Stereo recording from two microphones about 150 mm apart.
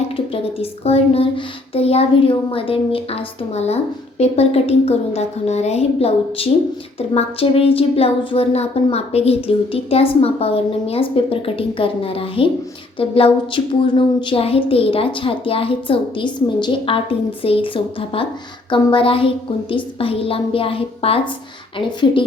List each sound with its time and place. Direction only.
0.1 s a woman's voice: 40° left (ahead or behind)